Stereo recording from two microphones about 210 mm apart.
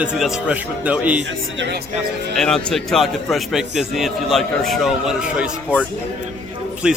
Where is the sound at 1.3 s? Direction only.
60° right (ahead or behind).